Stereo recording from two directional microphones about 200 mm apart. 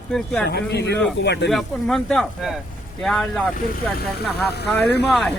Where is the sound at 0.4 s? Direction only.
55° left (ahead or behind).